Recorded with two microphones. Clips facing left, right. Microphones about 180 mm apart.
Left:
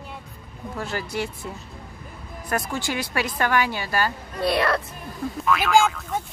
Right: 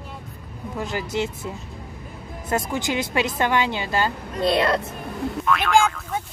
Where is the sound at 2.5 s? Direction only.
20° right (ahead or behind).